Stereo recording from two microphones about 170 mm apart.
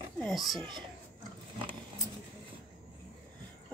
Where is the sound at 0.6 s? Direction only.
25° right (ahead or behind).